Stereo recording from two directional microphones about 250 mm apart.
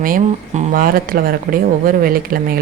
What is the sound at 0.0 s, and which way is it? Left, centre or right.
A woman's voice, right.